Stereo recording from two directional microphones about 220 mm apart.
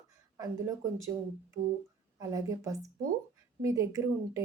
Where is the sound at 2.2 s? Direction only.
15° right (ahead or behind).